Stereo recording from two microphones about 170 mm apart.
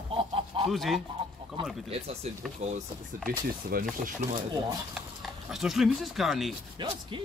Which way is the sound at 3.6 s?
60° right (ahead or behind).